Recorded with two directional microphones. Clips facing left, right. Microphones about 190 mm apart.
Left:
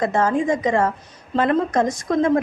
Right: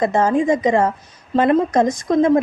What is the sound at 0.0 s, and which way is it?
A woman's voice, 15° right (ahead or behind).